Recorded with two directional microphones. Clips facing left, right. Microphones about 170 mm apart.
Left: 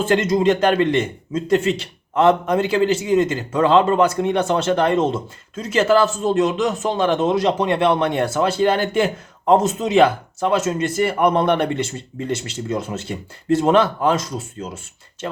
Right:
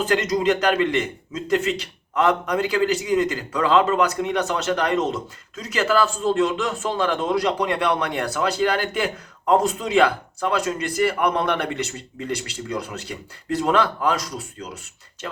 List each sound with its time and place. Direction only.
0.0 s a man's voice: 25° left (ahead or behind)